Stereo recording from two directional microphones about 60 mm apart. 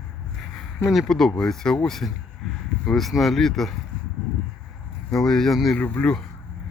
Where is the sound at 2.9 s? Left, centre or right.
Centre.